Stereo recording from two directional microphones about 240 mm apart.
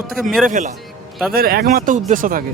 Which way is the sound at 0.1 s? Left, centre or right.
Centre.